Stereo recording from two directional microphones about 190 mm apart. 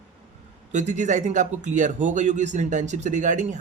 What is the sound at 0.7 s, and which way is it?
A man's voice, 40° right (ahead or behind).